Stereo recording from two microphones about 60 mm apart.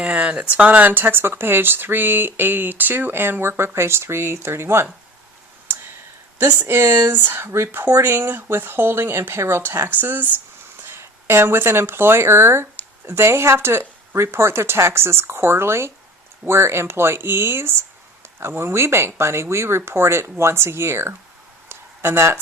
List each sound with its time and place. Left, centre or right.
0.1 s speech: right
6.4 s speech: right
10.8 s speech: right
21.7 s a sound: right